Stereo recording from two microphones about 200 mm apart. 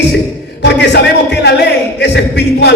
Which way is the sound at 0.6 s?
60° left (ahead or behind).